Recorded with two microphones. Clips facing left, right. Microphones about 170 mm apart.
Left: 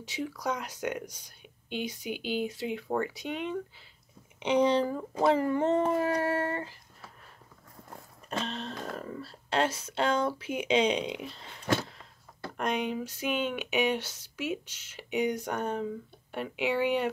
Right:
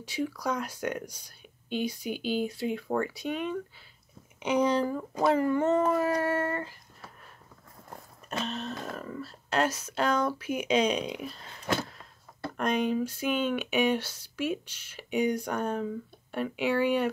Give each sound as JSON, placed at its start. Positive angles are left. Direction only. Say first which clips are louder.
{"t": 0.4, "sound": "speech", "louder": "right 1 dB", "side_deg": 20}
{"t": 8.3, "sound": "speech", "louder": "right 1 dB", "side_deg": 30}
{"t": 12.9, "sound": "speech", "louder": "right 3 dB", "side_deg": 15}